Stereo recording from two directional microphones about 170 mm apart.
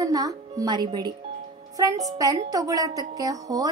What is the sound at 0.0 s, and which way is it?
Speech, 20° right (ahead or behind).